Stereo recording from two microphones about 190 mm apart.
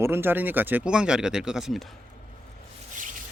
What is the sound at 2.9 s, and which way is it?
Rub, 45° right (ahead or behind).